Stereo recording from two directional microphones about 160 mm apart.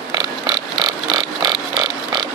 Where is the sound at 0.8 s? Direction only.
25° right (ahead or behind).